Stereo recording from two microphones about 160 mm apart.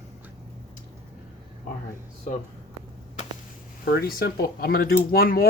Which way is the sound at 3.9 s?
70° left (ahead or behind).